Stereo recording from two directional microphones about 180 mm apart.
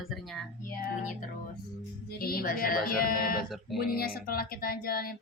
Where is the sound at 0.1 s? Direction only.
Centre (ahead or behind).